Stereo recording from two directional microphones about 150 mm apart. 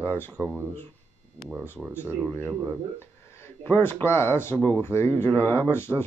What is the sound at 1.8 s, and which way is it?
Speech, 5° left (ahead or behind).